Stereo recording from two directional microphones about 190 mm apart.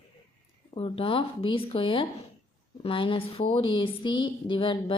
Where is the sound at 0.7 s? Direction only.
30° left (ahead or behind).